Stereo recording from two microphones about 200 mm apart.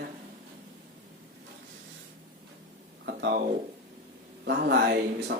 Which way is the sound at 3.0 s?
55° right (ahead or behind).